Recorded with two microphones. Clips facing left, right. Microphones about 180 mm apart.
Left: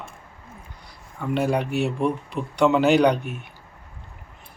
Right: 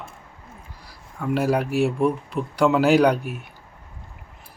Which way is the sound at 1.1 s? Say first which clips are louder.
Right 1 dB; 5° right (ahead or behind).